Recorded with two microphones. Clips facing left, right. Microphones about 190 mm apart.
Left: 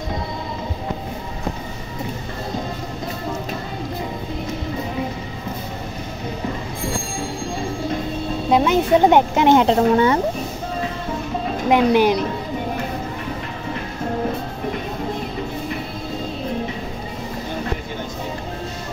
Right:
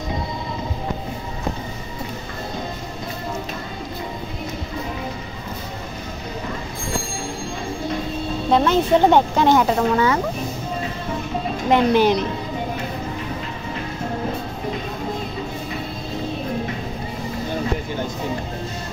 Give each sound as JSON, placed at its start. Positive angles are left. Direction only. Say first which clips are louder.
{"t": 8.5, "sound": "speech", "louder": "left 1 dB", "side_deg": 10}
{"t": 11.7, "sound": "speech", "louder": "left 1 dB", "side_deg": 10}